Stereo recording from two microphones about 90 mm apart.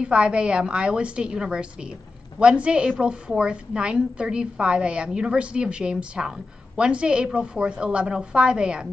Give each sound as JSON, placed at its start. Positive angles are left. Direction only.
{"t": 0.0, "sound": "a woman's voice", "side_deg": -10}